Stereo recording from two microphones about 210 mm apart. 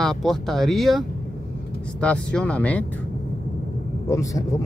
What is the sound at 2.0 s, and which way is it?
Speech, 5° left (ahead or behind).